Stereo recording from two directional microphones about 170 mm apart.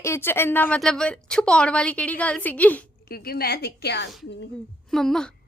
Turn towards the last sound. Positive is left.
turn(degrees=5)  # may be behind; listen again after turning